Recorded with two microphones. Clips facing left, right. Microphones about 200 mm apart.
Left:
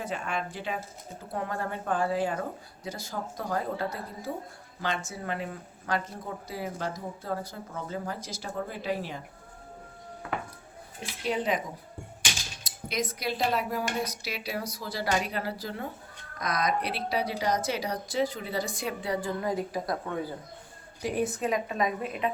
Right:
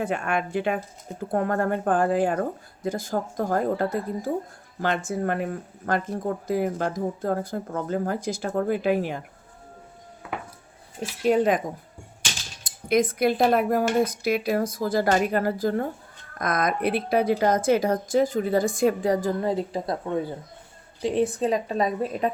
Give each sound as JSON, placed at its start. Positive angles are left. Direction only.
{"t": 0.0, "sound": "speech", "side_deg": -55}
{"t": 11.3, "sound": "speech", "side_deg": -50}
{"t": 12.6, "sound": "speech", "side_deg": -55}
{"t": 21.3, "sound": "a woman's voice", "side_deg": -30}